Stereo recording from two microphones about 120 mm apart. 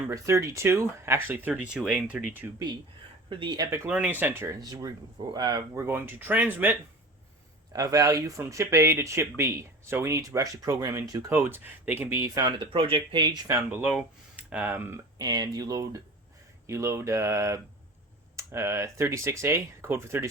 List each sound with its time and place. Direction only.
0.1 s speech: 25° right (ahead or behind)
1.5 s speech: 10° right (ahead or behind)
3.2 s speech: 45° right (ahead or behind)
3.8 s speech: 10° right (ahead or behind)
4.5 s speech: 30° right (ahead or behind)
5.7 s speech: 20° right (ahead or behind)
7.7 s speech: 30° right (ahead or behind)
12.7 s speech: 50° right (ahead or behind)
13.5 s speech: 20° right (ahead or behind)
13.8 s speech: 10° right (ahead or behind)
15.2 s speech: 35° right (ahead or behind)